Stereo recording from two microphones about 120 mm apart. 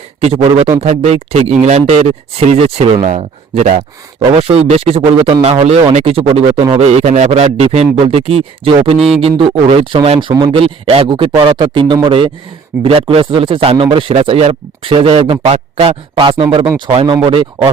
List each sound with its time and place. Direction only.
0.2 s speech: 60° right (ahead or behind)
2.0 s speech: 60° right (ahead or behind)
6.7 s speech: 65° right (ahead or behind)
9.0 s speech: centre (ahead or behind)
9.2 s speech: 45° right (ahead or behind)
15.5 s speech: 70° right (ahead or behind)
16.1 s speech: 45° right (ahead or behind)